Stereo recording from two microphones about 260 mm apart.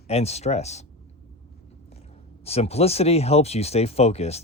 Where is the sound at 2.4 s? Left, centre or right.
Left.